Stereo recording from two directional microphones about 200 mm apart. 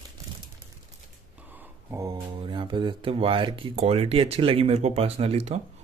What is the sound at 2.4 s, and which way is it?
Speech, 25° right (ahead or behind).